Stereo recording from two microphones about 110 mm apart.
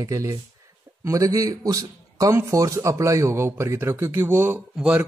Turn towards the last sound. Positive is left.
turn(degrees=-10)  # may be behind; listen again after turning